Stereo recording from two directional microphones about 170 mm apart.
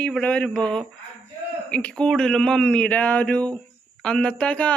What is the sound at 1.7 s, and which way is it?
Speech, 10° left (ahead or behind).